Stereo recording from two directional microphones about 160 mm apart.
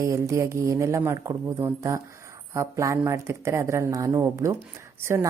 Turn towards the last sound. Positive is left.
turn(degrees=-15)  # may be behind; listen again after turning